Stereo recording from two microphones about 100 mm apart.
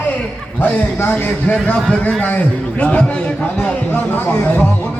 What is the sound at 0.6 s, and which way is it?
A man's voice, 20° left (ahead or behind).